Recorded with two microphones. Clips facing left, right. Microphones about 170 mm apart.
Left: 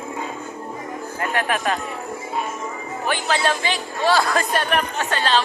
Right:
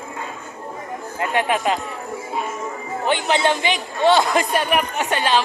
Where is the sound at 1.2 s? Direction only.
20° right (ahead or behind).